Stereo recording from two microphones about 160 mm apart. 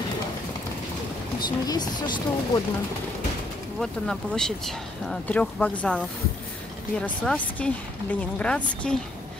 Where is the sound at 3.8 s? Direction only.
5° left (ahead or behind).